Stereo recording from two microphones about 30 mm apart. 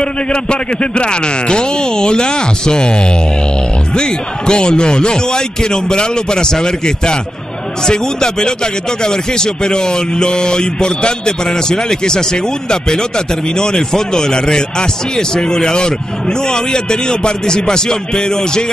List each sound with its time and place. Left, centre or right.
0.0 s a man's voice: left
3.9 s a man's voice: left